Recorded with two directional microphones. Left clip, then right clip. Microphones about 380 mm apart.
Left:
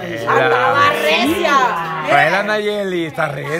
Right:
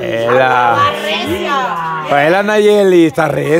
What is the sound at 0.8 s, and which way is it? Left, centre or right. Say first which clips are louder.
Speech: even; left.